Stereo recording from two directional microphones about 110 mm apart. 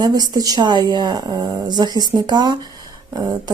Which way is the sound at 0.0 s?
35° right (ahead or behind).